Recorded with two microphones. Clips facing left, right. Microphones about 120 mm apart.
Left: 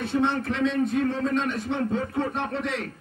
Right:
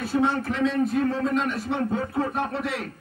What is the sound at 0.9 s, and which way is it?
Speech, 35° right (ahead or behind).